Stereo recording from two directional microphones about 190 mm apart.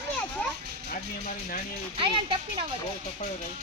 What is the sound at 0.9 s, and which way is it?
Speech, 45° left (ahead or behind).